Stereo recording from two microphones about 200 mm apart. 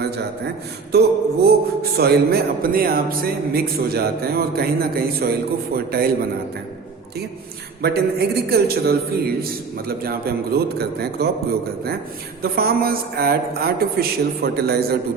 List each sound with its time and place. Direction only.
0.0 s a man's voice: 55° right (ahead or behind)
7.8 s a man's voice: 55° right (ahead or behind)
12.4 s a man's voice: 50° right (ahead or behind)